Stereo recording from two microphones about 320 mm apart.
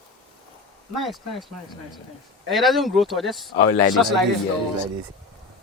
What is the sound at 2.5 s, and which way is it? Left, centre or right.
Speech, centre.